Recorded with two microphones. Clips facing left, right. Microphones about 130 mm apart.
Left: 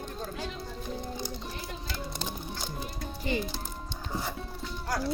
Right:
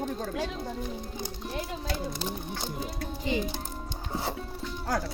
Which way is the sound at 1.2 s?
60° right (ahead or behind).